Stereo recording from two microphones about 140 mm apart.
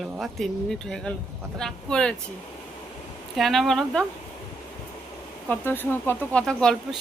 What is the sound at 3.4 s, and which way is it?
Speech, centre (ahead or behind).